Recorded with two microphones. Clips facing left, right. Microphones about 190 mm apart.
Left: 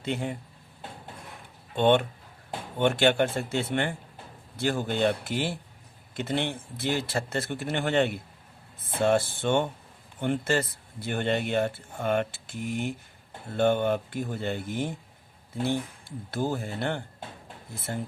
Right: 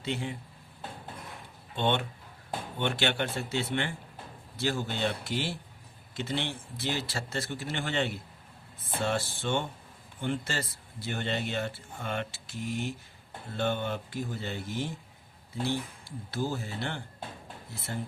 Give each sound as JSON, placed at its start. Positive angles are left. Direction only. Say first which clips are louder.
{"t": 0.0, "sound": "speech", "louder": "left 3 dB", "side_deg": 50}
{"t": 1.7, "sound": "speech", "louder": "left 7 dB", "side_deg": 50}
{"t": 17.9, "sound": "speech", "louder": "left 3 dB", "side_deg": 45}